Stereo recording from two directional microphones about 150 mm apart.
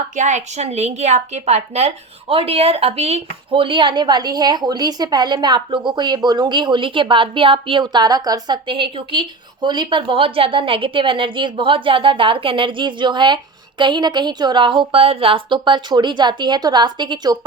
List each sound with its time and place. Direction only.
0.2 s a woman's voice: 55° right (ahead or behind); by 17.3 s 30° right (ahead or behind)